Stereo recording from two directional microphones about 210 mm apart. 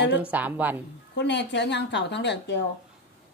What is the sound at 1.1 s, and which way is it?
A woman's voice, 55° left (ahead or behind).